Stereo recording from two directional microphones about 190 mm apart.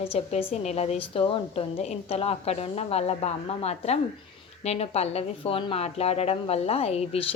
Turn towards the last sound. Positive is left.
turn(degrees=30)  # may be behind; listen again after turning